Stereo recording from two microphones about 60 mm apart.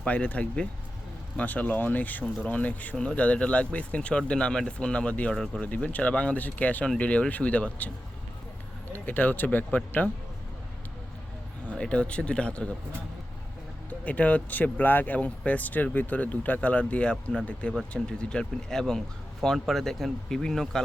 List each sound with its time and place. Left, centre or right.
0.0 s speech: left
5.3 s speech: centre
5.6 s speech: left
9.0 s speech: left
11.7 s speech: centre
14.0 s speech: left; by 20.8 s centre